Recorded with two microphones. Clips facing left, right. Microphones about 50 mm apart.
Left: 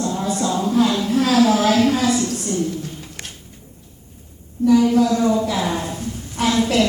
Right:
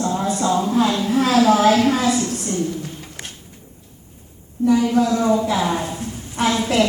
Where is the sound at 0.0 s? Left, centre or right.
Right.